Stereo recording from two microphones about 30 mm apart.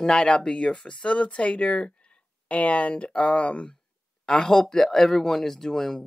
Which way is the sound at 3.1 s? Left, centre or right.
Left.